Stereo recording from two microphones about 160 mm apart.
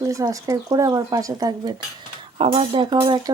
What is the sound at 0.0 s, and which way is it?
Speech, 20° right (ahead or behind).